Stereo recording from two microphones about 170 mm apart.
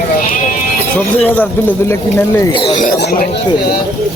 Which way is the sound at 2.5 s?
30° left (ahead or behind).